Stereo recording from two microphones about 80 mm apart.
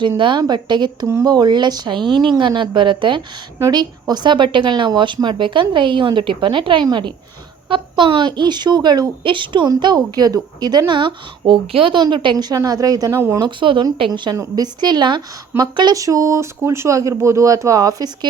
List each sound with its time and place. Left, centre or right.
0.2 s speech: right
2.4 s speech: right
3.7 s speech: right
8.4 s a woman's voice: right
9.6 s a woman's voice: right
12.5 s speech: right
13.1 s speech: right
13.4 s speech: right
14.0 s a woman's voice: right
14.3 s a woman's voice: right
16.0 s speech: right